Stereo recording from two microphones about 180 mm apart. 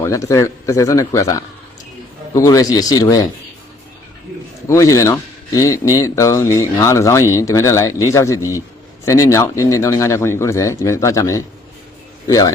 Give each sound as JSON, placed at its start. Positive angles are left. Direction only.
{"t": 0.0, "sound": "speech", "side_deg": 15}
{"t": 4.7, "sound": "speech", "side_deg": 20}